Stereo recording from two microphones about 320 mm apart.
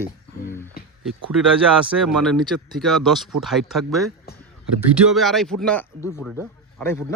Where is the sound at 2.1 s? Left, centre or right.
Centre.